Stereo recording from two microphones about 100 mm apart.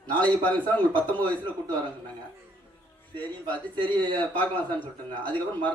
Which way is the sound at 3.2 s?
15° left (ahead or behind).